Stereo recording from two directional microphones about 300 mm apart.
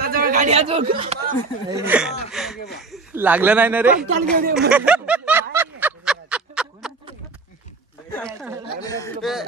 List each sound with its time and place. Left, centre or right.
0.0 s speech: right
1.9 s speech: centre
2.3 s a sound: centre
2.8 s speech: centre
4.6 s a sound: centre
8.8 s speech: centre
9.2 s speech: centre